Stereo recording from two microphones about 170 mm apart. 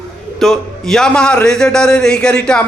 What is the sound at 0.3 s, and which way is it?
A man's voice, centre (ahead or behind).